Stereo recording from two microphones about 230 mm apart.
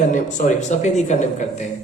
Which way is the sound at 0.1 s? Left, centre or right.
Left.